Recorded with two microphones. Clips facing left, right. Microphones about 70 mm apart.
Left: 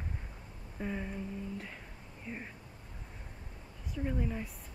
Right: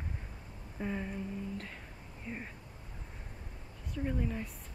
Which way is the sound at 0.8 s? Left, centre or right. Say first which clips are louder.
Right 1 dB; centre.